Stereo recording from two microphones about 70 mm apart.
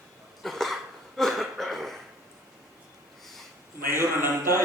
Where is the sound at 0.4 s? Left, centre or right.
Centre.